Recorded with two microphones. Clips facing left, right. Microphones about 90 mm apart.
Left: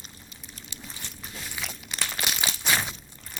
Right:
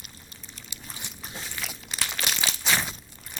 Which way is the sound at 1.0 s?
15° right (ahead or behind).